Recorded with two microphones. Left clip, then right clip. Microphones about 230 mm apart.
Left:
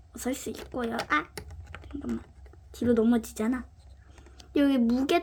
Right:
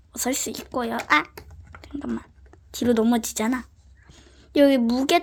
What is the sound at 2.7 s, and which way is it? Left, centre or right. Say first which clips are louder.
Speech: right 4 dB; centre.